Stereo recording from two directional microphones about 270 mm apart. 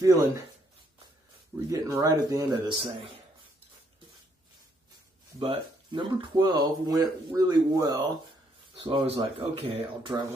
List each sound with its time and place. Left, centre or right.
0.0 s speech: centre
1.7 s speech: centre
5.4 s speech: centre